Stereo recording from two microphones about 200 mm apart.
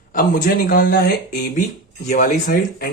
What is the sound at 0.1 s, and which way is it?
A man's voice, 40° left (ahead or behind).